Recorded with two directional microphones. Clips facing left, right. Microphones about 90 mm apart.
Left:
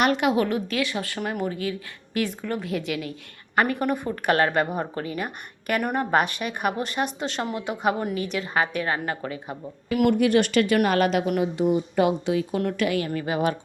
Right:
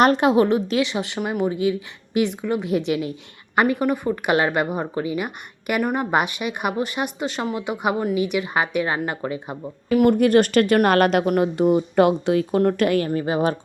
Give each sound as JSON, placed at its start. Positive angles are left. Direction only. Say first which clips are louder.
{"t": 0.0, "sound": "a woman's voice", "louder": "right 5 dB", "side_deg": -35}
{"t": 9.9, "sound": "speech", "louder": "right 4 dB", "side_deg": -35}
{"t": 13.1, "sound": "a woman's voice", "louder": "right 4 dB", "side_deg": -30}